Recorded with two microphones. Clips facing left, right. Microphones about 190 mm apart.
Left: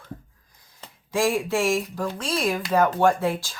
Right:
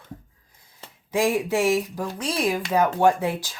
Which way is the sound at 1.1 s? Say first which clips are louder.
Right 1 dB; 20° right (ahead or behind).